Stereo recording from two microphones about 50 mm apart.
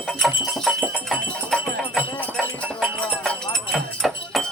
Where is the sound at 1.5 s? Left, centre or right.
Right.